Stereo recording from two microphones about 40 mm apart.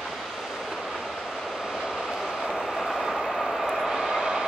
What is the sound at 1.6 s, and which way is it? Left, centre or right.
Vehicle, centre.